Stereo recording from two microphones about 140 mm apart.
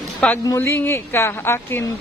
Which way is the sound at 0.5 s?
15° left (ahead or behind).